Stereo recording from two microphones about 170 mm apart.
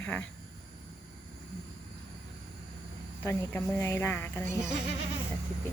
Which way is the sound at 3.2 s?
10° left (ahead or behind).